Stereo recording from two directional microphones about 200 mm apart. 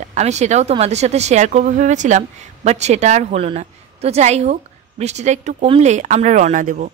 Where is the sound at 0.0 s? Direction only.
35° right (ahead or behind).